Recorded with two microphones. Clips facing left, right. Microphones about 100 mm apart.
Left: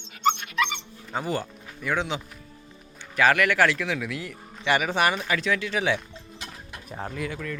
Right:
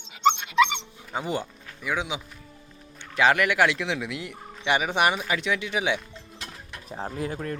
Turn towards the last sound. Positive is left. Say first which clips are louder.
# right 1 dB
turn(degrees=-40)  # may be behind; listen again after turning